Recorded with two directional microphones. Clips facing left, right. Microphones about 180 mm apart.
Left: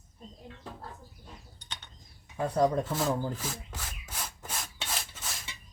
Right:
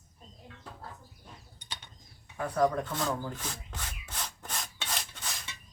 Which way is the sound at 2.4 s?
25° left (ahead or behind).